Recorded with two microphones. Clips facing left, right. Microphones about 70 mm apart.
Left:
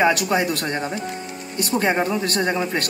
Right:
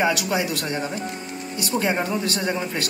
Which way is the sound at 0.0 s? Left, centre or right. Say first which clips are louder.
Left 3 dB; left.